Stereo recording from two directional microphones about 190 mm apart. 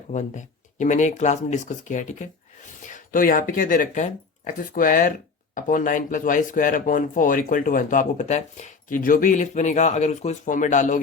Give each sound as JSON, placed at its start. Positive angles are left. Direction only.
{"t": 0.1, "sound": "speech", "side_deg": 40}